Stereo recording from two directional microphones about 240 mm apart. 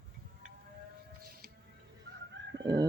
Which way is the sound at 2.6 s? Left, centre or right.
Centre.